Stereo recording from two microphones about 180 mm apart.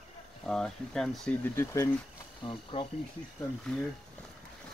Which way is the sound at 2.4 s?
30° left (ahead or behind).